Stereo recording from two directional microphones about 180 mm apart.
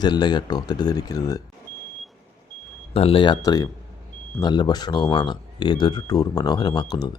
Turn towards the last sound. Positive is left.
turn(degrees=25)  # may be behind; listen again after turning